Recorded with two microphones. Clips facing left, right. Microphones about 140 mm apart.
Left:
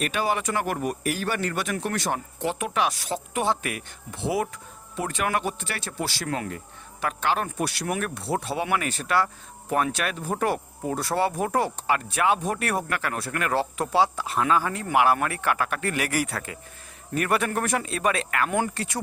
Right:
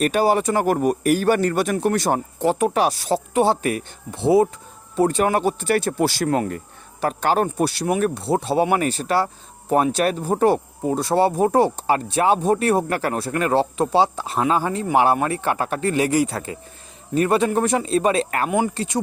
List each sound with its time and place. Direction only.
0.0 s speech: 40° right (ahead or behind)
18.4 s speech: 15° right (ahead or behind)
18.7 s speech: 25° right (ahead or behind)